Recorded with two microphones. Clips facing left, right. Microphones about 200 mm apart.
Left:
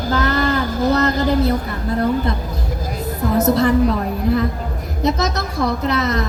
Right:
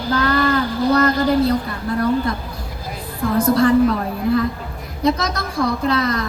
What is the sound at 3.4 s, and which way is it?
Child singing, 20° left (ahead or behind).